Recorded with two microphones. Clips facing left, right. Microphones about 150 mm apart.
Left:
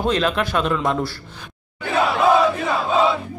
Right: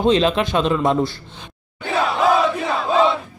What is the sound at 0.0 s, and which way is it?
Speech, 25° right (ahead or behind).